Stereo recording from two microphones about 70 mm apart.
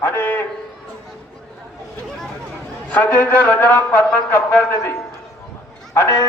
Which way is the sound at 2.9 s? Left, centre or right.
Left.